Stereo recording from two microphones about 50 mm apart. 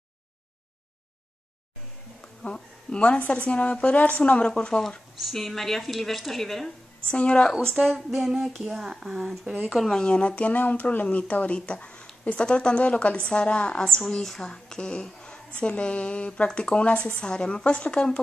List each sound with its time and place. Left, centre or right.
2.4 s a woman's voice: left
7.1 s speech: centre
7.8 s speech: centre
9.8 s a woman's voice: centre